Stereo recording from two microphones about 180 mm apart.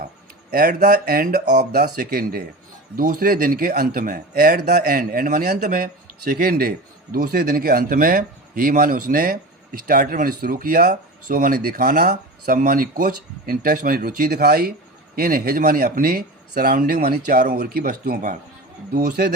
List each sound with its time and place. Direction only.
0.5 s speech: 55° right (ahead or behind)